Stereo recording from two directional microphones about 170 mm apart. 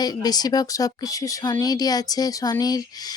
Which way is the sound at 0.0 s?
25° left (ahead or behind).